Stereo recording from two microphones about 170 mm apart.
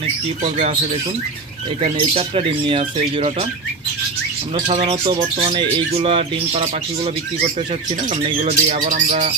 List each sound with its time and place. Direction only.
0.0 s speech: 40° right (ahead or behind)
1.8 s speech: 35° right (ahead or behind)
4.7 s speech: 35° right (ahead or behind)
8.1 s speech: 40° right (ahead or behind)